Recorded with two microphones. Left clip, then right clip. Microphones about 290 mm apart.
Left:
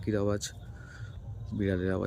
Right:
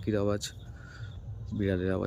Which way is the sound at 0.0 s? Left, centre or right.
Centre.